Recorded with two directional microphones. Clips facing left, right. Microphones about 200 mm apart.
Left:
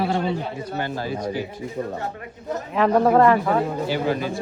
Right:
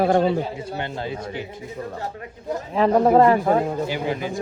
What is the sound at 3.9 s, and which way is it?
Speech, 15° right (ahead or behind).